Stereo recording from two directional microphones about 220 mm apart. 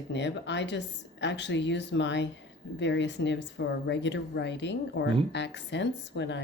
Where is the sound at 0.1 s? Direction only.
50° left (ahead or behind).